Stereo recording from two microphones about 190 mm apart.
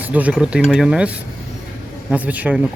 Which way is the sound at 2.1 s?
10° right (ahead or behind).